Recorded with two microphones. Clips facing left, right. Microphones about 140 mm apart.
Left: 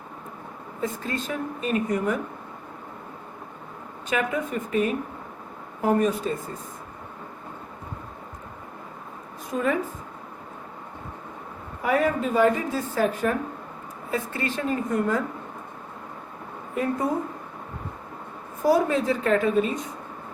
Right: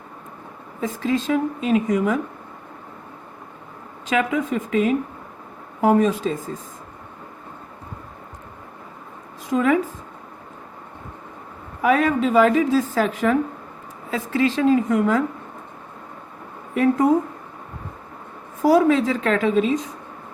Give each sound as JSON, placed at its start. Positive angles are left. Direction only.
{"t": 0.8, "sound": "a woman's voice", "side_deg": -90}
{"t": 4.1, "sound": "a woman's voice", "side_deg": -90}
{"t": 9.5, "sound": "a woman's voice", "side_deg": -90}
{"t": 11.8, "sound": "a woman's voice", "side_deg": -90}
{"t": 16.7, "sound": "a woman's voice", "side_deg": -90}
{"t": 18.6, "sound": "a woman's voice", "side_deg": -90}